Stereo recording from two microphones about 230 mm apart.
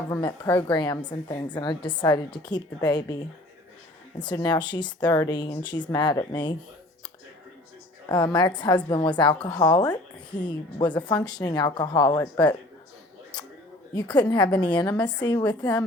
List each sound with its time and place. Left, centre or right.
0.1 s a woman's voice: centre
4.2 s a woman's voice: centre
8.1 s a woman's voice: centre
13.9 s a woman's voice: centre
15.4 s speech: centre